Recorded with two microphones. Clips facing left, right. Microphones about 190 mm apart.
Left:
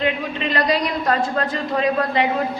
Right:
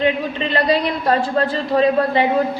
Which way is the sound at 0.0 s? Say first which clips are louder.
Right 3 dB; 30° right (ahead or behind).